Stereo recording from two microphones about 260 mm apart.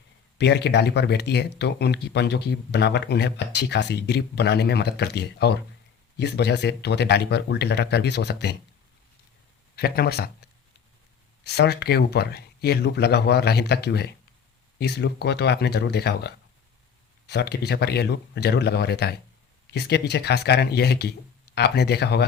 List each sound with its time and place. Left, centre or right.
0.3 s speech: left
9.7 s speech: left